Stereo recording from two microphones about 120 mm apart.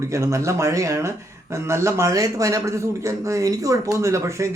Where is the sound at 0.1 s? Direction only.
25° right (ahead or behind).